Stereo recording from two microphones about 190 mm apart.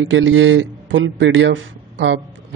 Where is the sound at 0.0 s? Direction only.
85° right.